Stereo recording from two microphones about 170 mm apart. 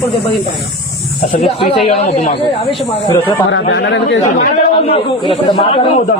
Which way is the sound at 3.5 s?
90° left.